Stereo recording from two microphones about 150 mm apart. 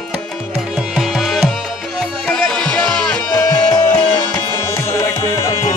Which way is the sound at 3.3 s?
25° left (ahead or behind).